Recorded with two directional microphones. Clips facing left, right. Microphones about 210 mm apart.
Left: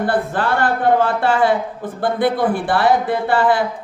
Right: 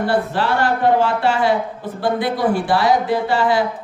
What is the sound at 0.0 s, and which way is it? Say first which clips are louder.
A man's voice: even; 50° left (ahead or behind).